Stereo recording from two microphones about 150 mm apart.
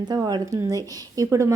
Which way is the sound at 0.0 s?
25° right (ahead or behind).